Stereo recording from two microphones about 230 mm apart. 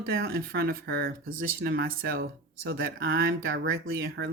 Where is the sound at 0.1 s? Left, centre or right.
Right.